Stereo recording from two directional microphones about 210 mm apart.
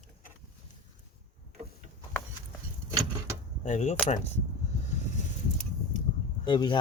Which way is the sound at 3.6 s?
35° left (ahead or behind).